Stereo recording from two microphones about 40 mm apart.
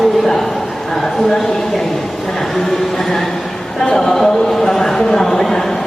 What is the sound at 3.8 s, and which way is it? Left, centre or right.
Speech, centre.